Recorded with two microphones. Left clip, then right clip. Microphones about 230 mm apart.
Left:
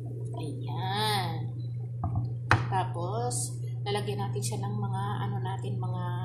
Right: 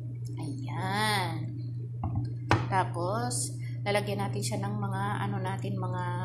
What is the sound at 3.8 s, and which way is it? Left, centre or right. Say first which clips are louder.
A woman's voice: right 3 dB; right.